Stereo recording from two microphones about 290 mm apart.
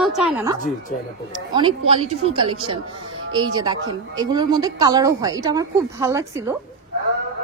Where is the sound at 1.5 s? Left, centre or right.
Centre.